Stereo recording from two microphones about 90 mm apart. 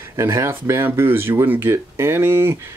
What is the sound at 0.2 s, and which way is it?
Speech, 30° right (ahead or behind).